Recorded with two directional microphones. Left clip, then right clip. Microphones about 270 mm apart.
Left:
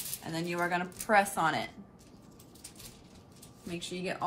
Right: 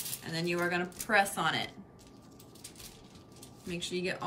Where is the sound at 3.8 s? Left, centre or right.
Centre.